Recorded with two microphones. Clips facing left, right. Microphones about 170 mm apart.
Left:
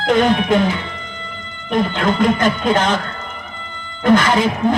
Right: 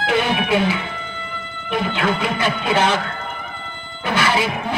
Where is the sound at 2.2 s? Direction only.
45° left (ahead or behind).